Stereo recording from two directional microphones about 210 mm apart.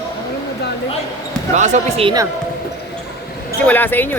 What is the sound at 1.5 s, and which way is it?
Speech, 35° right (ahead or behind).